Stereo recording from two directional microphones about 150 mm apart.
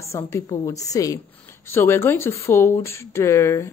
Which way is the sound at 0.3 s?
20° left (ahead or behind).